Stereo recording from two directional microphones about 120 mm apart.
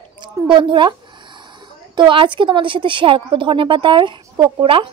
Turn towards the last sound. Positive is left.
turn(degrees=-50)  # may be behind; listen again after turning